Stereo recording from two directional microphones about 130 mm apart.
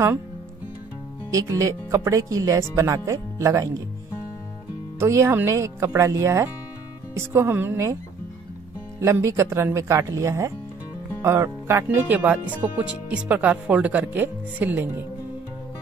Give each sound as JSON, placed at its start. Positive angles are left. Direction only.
{"t": 1.3, "sound": "speech", "side_deg": -25}
{"t": 4.9, "sound": "speech", "side_deg": -20}
{"t": 9.0, "sound": "speech", "side_deg": -20}